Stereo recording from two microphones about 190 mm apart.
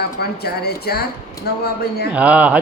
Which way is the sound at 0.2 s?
55° left (ahead or behind).